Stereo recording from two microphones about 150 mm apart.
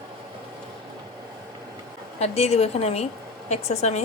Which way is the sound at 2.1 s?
45° left (ahead or behind).